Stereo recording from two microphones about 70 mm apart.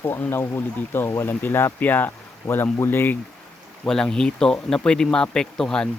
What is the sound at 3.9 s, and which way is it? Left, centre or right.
Speech, centre.